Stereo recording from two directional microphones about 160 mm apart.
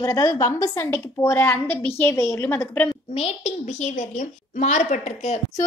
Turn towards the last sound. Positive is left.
turn(degrees=45)  # may be behind; listen again after turning